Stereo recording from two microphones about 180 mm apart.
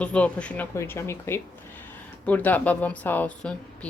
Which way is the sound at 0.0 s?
5° left (ahead or behind).